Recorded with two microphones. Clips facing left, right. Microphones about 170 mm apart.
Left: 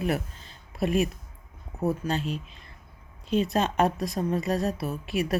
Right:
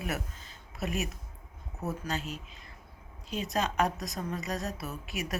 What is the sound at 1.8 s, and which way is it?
Speech, 30° left (ahead or behind).